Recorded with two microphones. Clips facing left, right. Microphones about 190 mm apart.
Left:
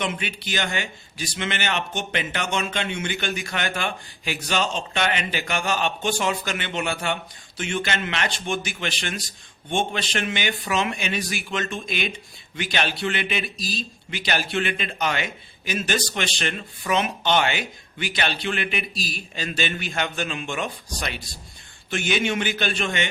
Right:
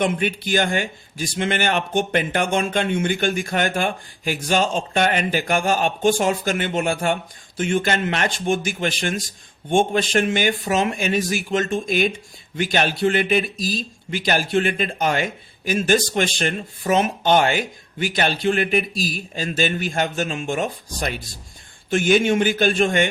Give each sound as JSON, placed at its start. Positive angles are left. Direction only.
{"t": 0.0, "sound": "speech", "side_deg": -50}